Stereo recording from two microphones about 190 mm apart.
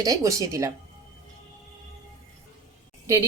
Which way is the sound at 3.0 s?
15° right (ahead or behind).